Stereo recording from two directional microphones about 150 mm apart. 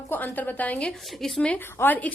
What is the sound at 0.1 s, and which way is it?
A woman's voice, 10° left (ahead or behind).